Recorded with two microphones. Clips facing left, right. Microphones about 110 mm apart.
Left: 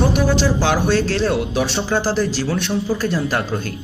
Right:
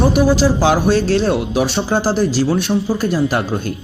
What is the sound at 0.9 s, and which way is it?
Speech, 25° right (ahead or behind).